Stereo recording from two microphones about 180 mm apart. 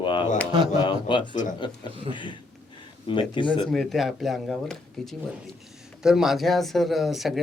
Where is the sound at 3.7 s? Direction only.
Centre (ahead or behind).